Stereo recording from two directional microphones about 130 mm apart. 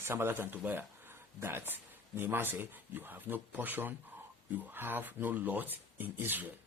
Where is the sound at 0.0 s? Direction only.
15° right (ahead or behind).